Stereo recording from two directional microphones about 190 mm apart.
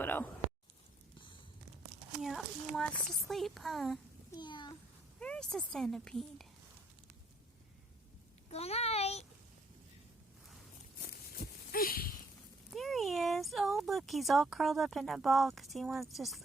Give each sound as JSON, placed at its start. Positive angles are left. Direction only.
{"t": 0.0, "sound": "a sound", "side_deg": 10}
{"t": 2.2, "sound": "speech", "side_deg": 0}
{"t": 4.3, "sound": "a child's voice", "side_deg": 25}
{"t": 5.2, "sound": "speech", "side_deg": 5}
{"t": 8.4, "sound": "a child's voice", "side_deg": 35}
{"t": 10.9, "sound": "a sound", "side_deg": 55}
{"t": 12.7, "sound": "speech", "side_deg": 0}